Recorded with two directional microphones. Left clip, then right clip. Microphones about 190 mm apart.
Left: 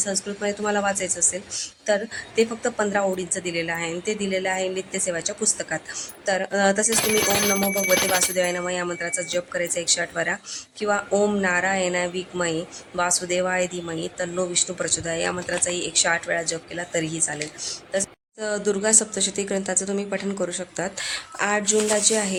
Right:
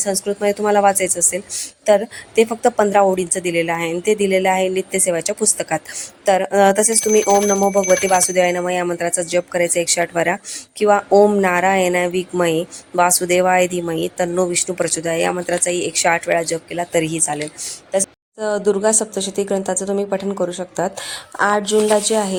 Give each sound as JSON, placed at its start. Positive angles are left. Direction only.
{"t": 0.0, "sound": "speech", "side_deg": -35}
{"t": 8.1, "sound": "speech", "side_deg": -35}
{"t": 18.0, "sound": "a woman's voice", "side_deg": -20}